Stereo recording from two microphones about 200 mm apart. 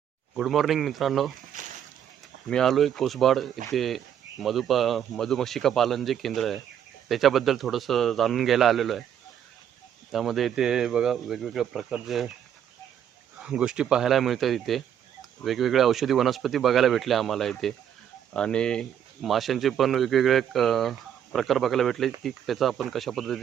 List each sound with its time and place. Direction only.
0.3 s speech: centre (ahead or behind)
1.5 s a sound: 40° right (ahead or behind)
2.5 s speech: centre (ahead or behind)
10.1 s speech: centre (ahead or behind)
13.4 s speech: 5° right (ahead or behind)